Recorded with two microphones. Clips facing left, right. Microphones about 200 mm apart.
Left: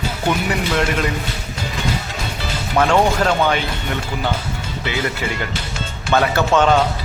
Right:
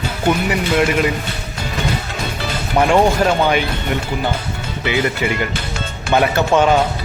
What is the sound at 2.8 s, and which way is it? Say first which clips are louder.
Speech: right 2 dB; 15° right (ahead or behind).